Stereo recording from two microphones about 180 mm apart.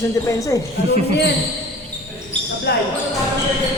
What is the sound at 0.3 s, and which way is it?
Speech, 20° left (ahead or behind).